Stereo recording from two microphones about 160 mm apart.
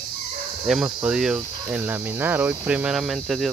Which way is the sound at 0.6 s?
5° right (ahead or behind).